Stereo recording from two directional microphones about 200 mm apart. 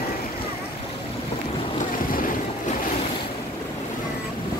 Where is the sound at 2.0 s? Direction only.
45° left (ahead or behind).